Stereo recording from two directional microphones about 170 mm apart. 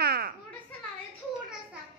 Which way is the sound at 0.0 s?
65° right (ahead or behind).